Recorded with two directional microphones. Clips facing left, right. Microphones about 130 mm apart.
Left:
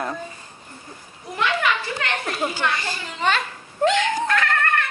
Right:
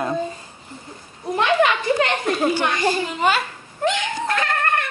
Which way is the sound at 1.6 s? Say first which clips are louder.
Right 7 dB; 20° right (ahead or behind).